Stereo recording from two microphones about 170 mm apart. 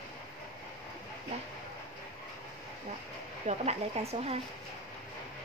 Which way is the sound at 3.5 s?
40° right (ahead or behind).